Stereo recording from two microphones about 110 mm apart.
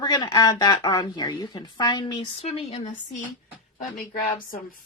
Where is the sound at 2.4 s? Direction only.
70° left (ahead or behind).